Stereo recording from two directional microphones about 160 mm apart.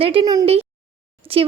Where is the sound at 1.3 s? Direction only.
35° right (ahead or behind).